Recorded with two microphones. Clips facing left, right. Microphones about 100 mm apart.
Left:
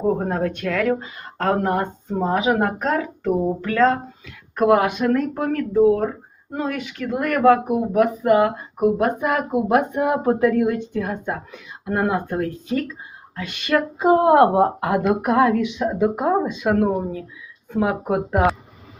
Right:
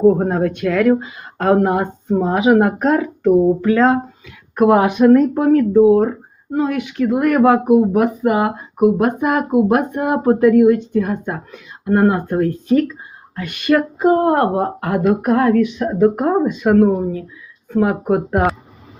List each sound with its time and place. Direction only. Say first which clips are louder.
0.3 s speech: right 5 dB; 10° right (ahead or behind)
6.5 s speech: right 7 dB; 5° right (ahead or behind)
14.2 s speech: left 1 dB; 10° left (ahead or behind)